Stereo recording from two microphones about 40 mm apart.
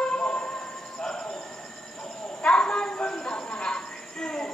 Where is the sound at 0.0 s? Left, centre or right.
Left.